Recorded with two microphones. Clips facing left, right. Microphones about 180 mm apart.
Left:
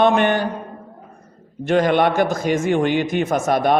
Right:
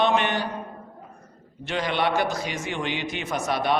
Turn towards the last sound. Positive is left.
turn(degrees=50)  # may be behind; listen again after turning